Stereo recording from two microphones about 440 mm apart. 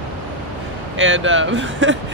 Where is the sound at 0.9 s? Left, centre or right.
Right.